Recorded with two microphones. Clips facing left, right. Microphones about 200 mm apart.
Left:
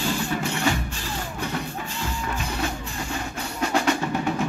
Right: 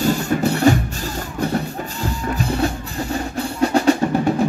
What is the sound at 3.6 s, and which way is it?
Percussion, 35° right (ahead or behind).